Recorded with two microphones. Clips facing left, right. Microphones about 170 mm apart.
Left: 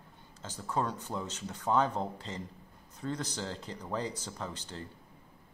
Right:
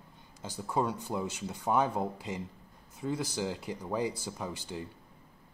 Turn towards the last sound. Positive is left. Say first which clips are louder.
# right 3 dB
turn(degrees=-10)  # may be behind; listen again after turning